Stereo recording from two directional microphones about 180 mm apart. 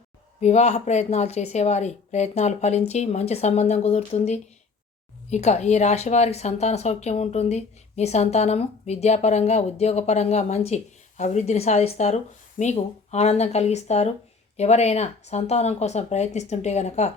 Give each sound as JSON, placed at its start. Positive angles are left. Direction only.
{"t": 0.3, "sound": "a woman's voice", "side_deg": 40}